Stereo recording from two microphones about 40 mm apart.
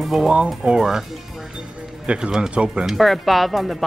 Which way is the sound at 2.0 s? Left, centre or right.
Right.